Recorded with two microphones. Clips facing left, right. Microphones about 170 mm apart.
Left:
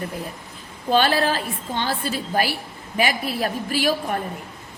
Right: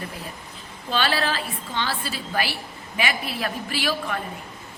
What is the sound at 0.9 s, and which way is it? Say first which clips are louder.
A woman's voice: left 5 dB; 45° left (ahead or behind).